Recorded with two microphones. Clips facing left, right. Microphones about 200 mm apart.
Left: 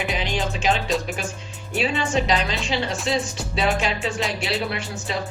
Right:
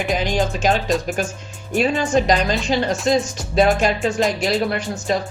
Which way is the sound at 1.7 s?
45° right (ahead or behind).